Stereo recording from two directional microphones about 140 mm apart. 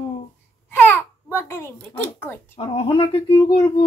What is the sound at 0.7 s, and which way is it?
A child's voice, 15° left (ahead or behind).